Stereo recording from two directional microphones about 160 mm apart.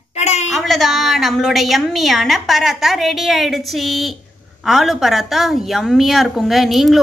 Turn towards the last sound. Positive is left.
turn(degrees=0)  # may be behind; listen again after turning